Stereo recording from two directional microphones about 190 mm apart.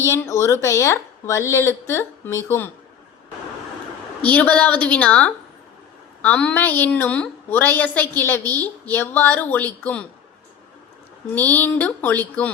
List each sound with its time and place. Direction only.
0.0 s a woman's voice: 15° left (ahead or behind)
4.2 s a woman's voice: 10° left (ahead or behind)
11.3 s a woman's voice: 10° left (ahead or behind)